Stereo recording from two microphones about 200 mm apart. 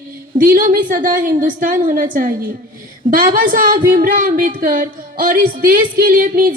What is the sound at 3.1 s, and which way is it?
Speech, 45° right (ahead or behind).